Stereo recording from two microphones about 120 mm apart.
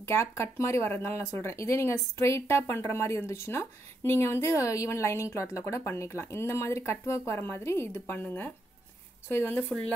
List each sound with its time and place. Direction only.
0.0 s speech: 20° left (ahead or behind)